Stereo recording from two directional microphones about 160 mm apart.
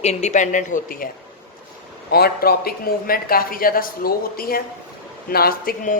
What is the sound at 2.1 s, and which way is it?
Speech, 80° left.